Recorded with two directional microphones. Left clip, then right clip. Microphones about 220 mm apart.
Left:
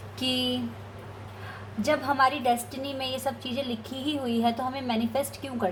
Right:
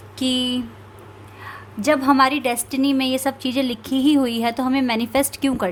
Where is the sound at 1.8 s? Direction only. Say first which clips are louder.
Right 7 dB; 45° right (ahead or behind).